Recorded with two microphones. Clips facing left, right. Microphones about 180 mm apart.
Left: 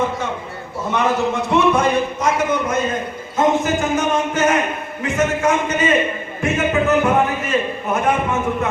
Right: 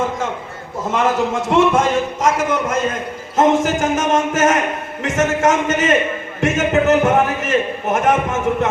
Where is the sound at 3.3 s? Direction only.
90° right.